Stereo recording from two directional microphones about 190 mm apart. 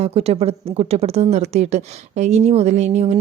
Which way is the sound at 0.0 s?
30° right (ahead or behind).